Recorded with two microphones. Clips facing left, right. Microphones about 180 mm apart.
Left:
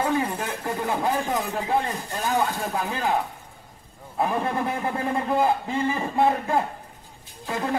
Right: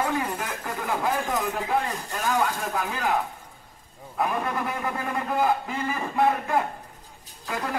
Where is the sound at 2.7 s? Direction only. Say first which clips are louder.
Left 1 dB; 30° left (ahead or behind).